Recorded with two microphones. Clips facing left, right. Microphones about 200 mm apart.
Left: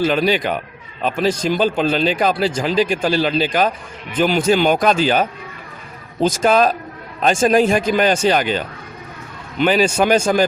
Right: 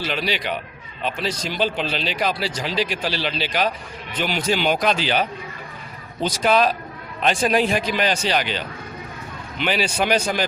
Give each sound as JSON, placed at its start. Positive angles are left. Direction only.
{"t": 0.0, "sound": "speech", "side_deg": 50}
{"t": 9.6, "sound": "speech", "side_deg": 45}